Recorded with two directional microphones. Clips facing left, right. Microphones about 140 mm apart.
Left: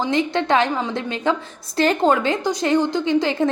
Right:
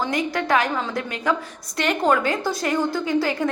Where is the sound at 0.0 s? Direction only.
25° left (ahead or behind).